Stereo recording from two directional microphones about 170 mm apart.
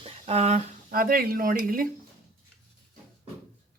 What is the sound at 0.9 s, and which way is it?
Speech, 60° right (ahead or behind).